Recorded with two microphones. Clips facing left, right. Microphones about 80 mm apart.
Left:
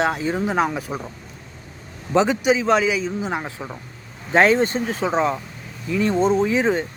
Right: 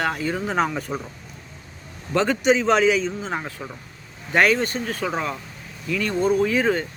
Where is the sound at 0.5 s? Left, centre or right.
Centre.